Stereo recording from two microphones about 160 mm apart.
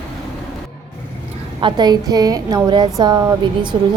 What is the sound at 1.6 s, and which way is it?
A woman's voice, 25° right (ahead or behind).